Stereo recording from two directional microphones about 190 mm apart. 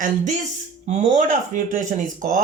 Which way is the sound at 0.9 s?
40° right (ahead or behind).